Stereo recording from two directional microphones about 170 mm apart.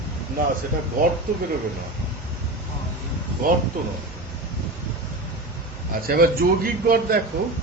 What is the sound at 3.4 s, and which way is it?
Speech, 55° right (ahead or behind).